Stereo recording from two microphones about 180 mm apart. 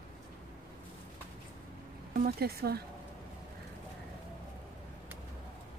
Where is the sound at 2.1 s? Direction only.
50° right (ahead or behind).